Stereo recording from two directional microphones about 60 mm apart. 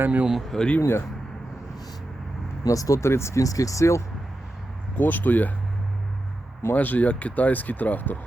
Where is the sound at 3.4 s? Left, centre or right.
Left.